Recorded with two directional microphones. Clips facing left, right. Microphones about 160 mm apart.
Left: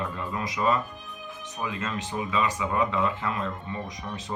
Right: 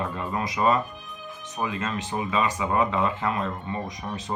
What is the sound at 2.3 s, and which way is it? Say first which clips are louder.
Speech: right 2 dB; 55° right (ahead or behind).